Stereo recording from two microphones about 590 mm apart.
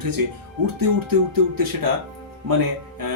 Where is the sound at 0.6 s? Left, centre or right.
Right.